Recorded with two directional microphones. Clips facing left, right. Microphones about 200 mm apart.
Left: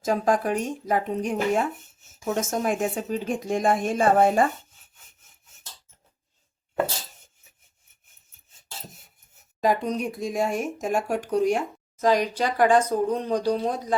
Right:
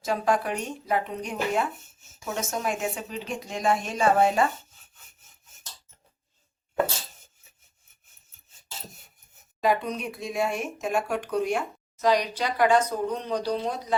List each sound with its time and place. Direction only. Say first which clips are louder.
0.0 s speech: left 3 dB; 45° left (ahead or behind)
9.6 s a woman's voice: left 2 dB; 45° left (ahead or behind)